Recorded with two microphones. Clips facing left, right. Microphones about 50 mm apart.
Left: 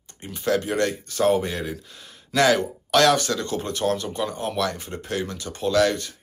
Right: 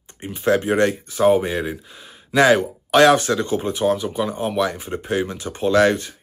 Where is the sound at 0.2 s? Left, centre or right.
Right.